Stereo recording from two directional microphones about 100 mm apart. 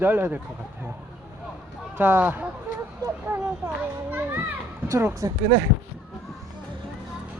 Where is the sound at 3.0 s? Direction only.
20° right (ahead or behind).